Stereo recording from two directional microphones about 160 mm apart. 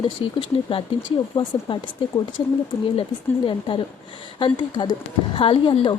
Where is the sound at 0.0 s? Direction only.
35° left (ahead or behind).